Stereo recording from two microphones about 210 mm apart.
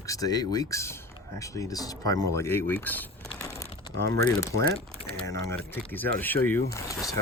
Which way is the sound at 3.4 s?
15° left (ahead or behind).